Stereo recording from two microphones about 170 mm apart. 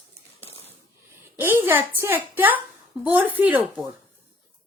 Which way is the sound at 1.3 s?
10° right (ahead or behind).